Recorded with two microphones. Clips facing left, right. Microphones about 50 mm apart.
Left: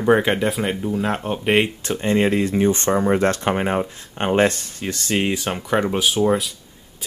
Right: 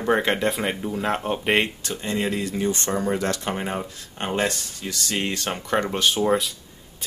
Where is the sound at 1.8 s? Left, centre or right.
Left.